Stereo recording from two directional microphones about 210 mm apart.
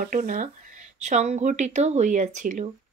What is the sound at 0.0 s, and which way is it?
Speech, 40° right (ahead or behind).